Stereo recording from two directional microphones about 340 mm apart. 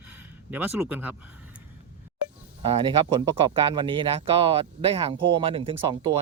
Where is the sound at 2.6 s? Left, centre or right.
Centre.